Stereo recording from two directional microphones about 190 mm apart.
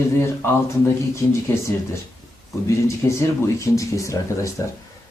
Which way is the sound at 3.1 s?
15° left (ahead or behind).